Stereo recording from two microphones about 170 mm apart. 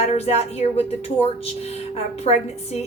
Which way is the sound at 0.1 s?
40° left (ahead or behind).